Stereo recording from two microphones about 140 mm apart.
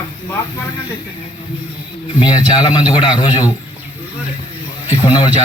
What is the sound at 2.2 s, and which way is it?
A man's voice, 30° left (ahead or behind).